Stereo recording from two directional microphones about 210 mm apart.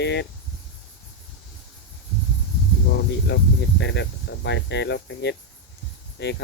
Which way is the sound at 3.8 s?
55° left (ahead or behind).